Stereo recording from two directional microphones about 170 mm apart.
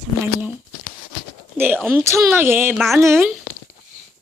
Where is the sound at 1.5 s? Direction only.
10° right (ahead or behind).